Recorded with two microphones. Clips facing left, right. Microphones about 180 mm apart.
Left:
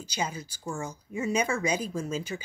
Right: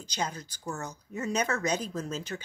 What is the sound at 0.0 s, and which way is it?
Speech, 10° left (ahead or behind).